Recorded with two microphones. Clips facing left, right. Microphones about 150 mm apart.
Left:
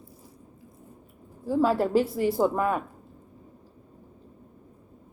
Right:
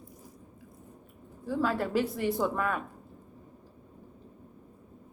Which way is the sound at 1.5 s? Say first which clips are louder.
Left 6 dB; 35° left (ahead or behind).